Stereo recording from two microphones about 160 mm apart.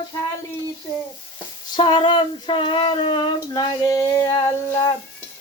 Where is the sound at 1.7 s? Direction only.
30° left (ahead or behind).